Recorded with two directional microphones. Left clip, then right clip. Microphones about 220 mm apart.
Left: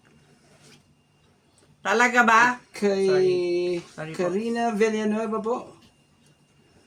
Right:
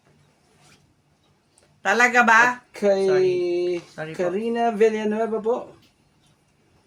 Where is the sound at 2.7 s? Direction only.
20° left (ahead or behind).